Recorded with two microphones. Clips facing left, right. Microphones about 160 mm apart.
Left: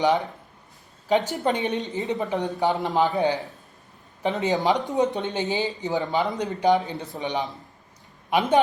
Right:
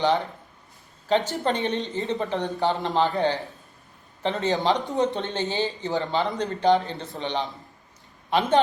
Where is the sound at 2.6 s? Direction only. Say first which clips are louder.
Left 1 dB; 15° left (ahead or behind).